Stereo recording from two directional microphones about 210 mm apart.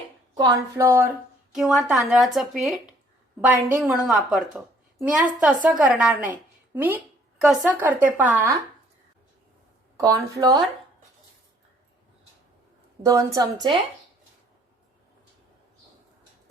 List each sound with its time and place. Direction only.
0.3 s a woman's voice: 15° right (ahead or behind)
10.0 s a woman's voice: 15° right (ahead or behind)
13.1 s a woman's voice: 15° right (ahead or behind)